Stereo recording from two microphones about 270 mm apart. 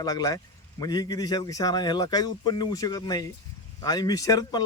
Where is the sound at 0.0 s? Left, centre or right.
Centre.